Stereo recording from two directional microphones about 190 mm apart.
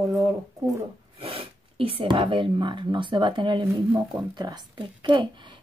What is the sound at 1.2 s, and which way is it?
Speech, 30° right (ahead or behind).